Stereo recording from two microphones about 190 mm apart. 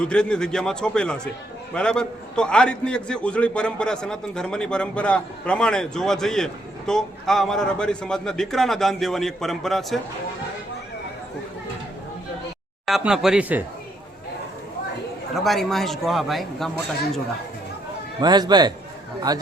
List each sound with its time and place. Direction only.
0.0 s a man's voice: 5° left (ahead or behind)
12.8 s a man's voice: centre (ahead or behind)
15.4 s a man's voice: centre (ahead or behind)
18.2 s a man's voice: 20° right (ahead or behind)